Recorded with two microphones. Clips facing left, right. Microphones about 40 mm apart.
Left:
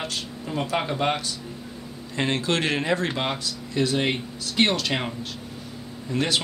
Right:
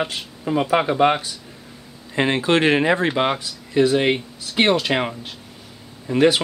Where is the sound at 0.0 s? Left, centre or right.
Right.